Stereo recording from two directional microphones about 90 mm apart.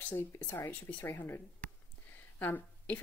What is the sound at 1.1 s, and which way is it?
A woman's voice, 25° left (ahead or behind).